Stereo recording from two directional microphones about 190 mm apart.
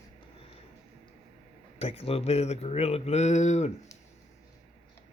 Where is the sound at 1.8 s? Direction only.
30° left (ahead or behind).